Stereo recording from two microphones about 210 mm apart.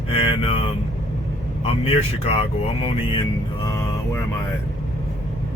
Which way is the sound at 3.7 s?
15° left (ahead or behind).